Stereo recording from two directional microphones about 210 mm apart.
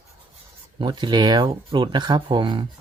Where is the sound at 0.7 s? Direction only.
20° right (ahead or behind).